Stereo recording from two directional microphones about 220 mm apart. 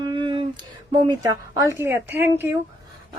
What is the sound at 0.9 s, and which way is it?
Speech, 20° right (ahead or behind).